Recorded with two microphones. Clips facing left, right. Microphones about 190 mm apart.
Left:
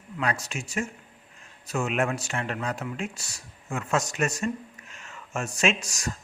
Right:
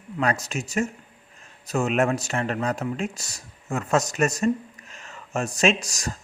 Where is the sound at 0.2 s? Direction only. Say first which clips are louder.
Right 4 dB; 45° right (ahead or behind).